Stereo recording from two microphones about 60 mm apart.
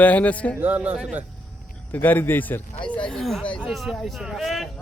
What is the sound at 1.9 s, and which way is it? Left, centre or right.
Speech, left.